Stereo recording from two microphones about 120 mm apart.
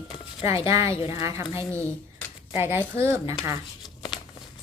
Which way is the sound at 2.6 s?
20° right (ahead or behind).